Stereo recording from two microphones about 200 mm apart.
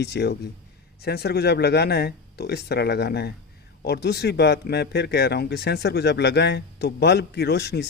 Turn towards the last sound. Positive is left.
turn(degrees=55)  # may be behind; listen again after turning